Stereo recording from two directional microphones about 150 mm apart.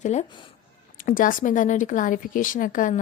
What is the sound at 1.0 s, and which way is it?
A woman's voice, 65° left (ahead or behind).